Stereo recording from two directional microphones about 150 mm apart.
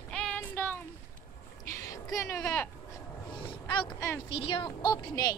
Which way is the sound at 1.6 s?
20° left (ahead or behind).